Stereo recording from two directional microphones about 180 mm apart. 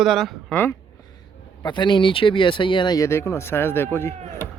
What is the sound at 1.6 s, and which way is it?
A man's voice, 25° left (ahead or behind).